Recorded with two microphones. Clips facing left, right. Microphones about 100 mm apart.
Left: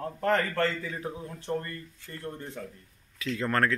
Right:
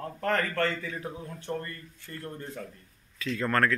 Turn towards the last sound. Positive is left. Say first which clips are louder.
# right 1 dB
turn(degrees=20)  # may be behind; listen again after turning